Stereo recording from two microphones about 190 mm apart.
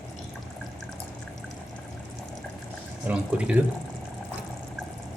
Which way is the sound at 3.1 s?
5° right (ahead or behind).